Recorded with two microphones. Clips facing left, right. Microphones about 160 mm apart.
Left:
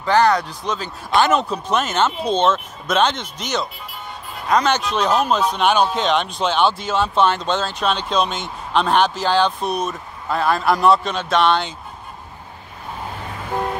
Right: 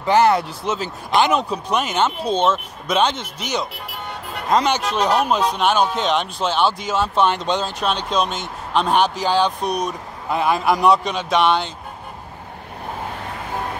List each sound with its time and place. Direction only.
0.0 s speech: 20° right (ahead or behind)
3.7 s music: 75° right (ahead or behind)
4.9 s speech: 10° right (ahead or behind)